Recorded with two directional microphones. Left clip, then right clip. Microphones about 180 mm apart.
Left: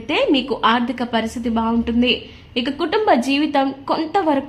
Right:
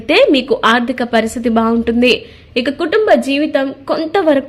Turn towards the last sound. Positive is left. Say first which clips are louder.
# right 6 dB
turn(degrees=-20)  # may be behind; listen again after turning